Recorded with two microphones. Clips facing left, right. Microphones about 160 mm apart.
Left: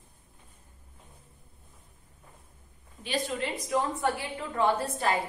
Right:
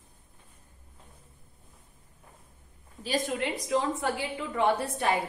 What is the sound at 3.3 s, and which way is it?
A woman's voice, 65° right (ahead or behind).